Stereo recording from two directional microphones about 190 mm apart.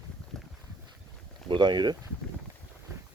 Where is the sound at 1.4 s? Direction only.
25° right (ahead or behind).